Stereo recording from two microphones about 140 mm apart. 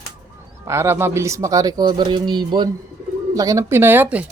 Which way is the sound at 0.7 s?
20° right (ahead or behind).